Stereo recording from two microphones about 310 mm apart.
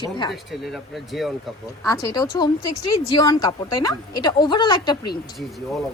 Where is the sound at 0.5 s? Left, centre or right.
Centre.